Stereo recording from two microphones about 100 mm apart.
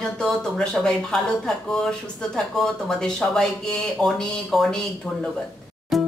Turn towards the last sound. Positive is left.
turn(degrees=0)  # may be behind; listen again after turning